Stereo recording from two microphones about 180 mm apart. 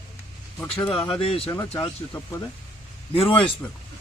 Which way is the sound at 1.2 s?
30° left (ahead or behind).